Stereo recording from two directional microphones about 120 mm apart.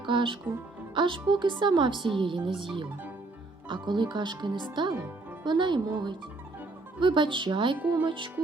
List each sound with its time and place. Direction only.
0.0 s speech: 40° right (ahead or behind)
7.8 s speech: 15° right (ahead or behind)
8.0 s speech: 45° right (ahead or behind)